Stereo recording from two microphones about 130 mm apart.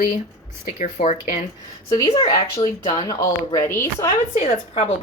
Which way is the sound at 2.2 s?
40° left (ahead or behind).